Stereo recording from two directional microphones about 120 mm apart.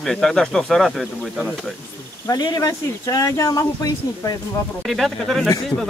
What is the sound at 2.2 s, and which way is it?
Speech, 35° left (ahead or behind).